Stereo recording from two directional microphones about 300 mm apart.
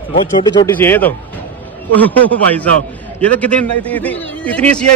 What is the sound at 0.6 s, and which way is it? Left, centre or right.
A man's voice, centre.